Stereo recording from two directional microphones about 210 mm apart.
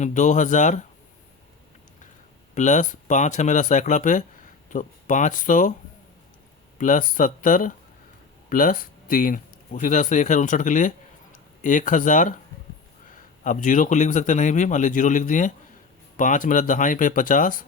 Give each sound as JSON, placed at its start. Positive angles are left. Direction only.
{"t": 0.0, "sound": "a man's voice", "side_deg": 35}
{"t": 2.6, "sound": "a man's voice", "side_deg": 35}
{"t": 6.7, "sound": "a man's voice", "side_deg": 40}